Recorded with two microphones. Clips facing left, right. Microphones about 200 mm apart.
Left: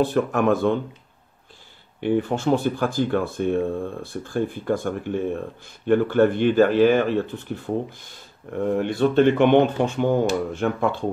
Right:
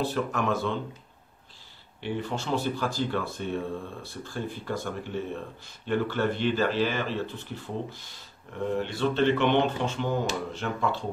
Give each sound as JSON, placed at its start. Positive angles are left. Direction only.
{"t": 0.0, "sound": "speech", "side_deg": 55}
{"t": 2.0, "sound": "speech", "side_deg": 50}